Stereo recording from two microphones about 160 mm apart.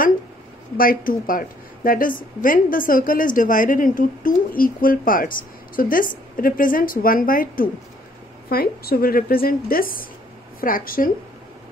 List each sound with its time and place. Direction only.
0.7 s a woman's voice: 60° left (ahead or behind)